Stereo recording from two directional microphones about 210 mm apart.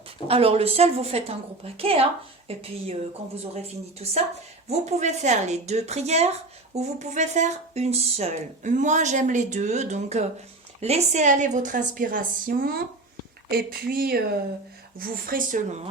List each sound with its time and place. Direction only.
0.3 s a woman's voice: 25° right (ahead or behind)
4.0 s a woman's voice: 30° right (ahead or behind)